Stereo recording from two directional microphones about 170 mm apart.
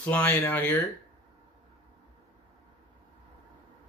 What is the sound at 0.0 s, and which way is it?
Speech, 10° left (ahead or behind).